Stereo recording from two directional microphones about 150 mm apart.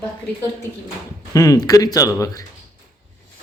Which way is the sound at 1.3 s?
25° left (ahead or behind).